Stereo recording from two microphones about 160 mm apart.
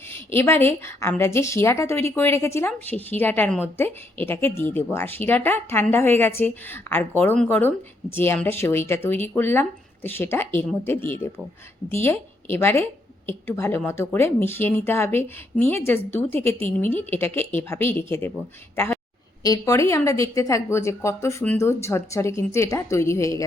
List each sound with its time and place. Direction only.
0.1 s a sound: 15° left (ahead or behind)
0.9 s a woman's voice: 15° left (ahead or behind)
19.4 s a woman's voice: 20° left (ahead or behind)